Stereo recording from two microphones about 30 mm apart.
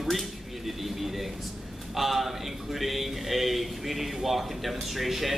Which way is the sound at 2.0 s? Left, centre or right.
Centre.